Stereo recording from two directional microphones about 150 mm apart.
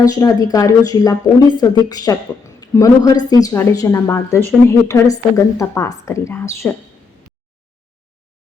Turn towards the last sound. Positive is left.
turn(degrees=20)  # may be behind; listen again after turning